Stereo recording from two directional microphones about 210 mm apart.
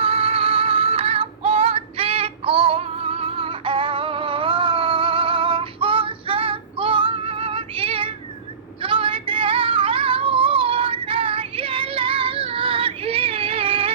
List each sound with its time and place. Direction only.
0.0 s music: 25° right (ahead or behind)
8.8 s yodeling: 25° right (ahead or behind)